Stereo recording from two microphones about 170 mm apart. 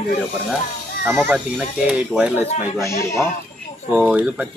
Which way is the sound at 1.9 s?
5° right (ahead or behind).